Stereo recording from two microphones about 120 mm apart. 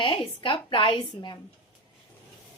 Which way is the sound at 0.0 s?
45° left (ahead or behind).